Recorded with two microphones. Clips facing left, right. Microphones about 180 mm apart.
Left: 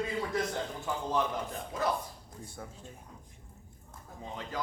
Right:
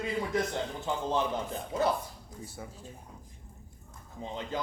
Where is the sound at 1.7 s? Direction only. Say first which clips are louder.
Right 5 dB; 25° right (ahead or behind).